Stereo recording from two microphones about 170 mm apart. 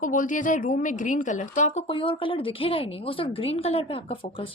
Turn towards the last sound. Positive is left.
turn(degrees=30)  # may be behind; listen again after turning